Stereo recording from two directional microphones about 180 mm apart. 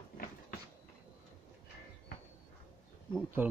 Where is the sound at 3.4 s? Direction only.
10° right (ahead or behind).